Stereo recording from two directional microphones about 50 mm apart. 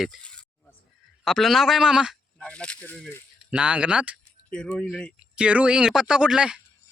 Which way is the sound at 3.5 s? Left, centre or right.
Right.